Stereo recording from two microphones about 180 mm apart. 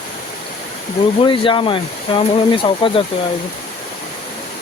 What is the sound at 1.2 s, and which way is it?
Speech, 25° left (ahead or behind).